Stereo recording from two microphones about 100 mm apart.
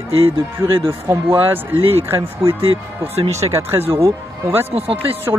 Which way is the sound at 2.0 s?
25° right (ahead or behind).